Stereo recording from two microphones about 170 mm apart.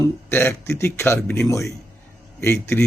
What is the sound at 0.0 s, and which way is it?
A man's voice, 15° left (ahead or behind).